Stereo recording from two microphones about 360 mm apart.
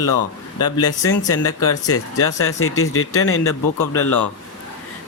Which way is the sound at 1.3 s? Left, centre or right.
Left.